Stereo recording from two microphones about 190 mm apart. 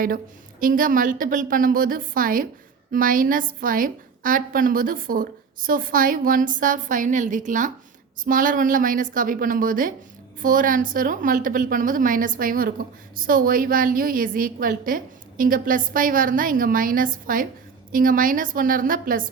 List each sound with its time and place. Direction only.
0.6 s a woman's voice: 45° right (ahead or behind)